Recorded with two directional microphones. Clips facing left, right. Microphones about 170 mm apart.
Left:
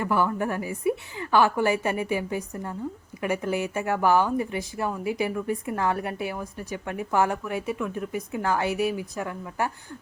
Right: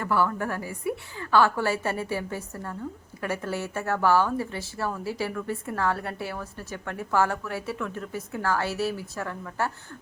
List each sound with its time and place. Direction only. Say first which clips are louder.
0.0 s speech: left 1 dB; 20° left (ahead or behind)